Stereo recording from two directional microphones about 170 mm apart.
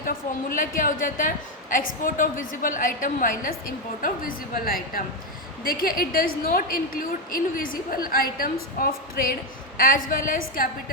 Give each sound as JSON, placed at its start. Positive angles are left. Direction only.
{"t": 0.0, "sound": "a woman's voice", "side_deg": 55}